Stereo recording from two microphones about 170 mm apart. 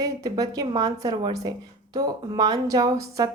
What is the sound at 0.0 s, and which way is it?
Speech, 20° right (ahead or behind).